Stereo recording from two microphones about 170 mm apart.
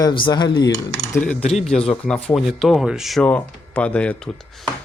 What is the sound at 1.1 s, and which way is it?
Speech, 10° left (ahead or behind).